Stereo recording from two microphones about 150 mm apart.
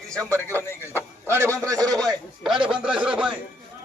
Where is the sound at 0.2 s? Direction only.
20° right (ahead or behind); by 2.8 s 35° right (ahead or behind).